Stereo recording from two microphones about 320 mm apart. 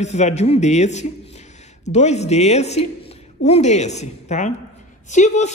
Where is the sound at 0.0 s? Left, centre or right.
Left.